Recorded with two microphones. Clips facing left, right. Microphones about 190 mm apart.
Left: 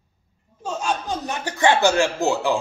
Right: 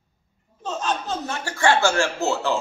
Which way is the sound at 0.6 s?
10° left (ahead or behind).